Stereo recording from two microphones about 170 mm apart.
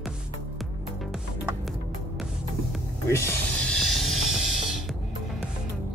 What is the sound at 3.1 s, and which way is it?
Music, 15° left (ahead or behind).